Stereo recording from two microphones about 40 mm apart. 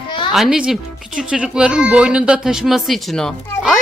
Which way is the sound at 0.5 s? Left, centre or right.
Centre.